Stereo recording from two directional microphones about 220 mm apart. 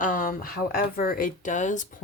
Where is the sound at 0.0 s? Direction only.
35° left (ahead or behind).